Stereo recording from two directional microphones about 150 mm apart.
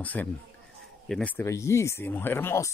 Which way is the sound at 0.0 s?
10° left (ahead or behind).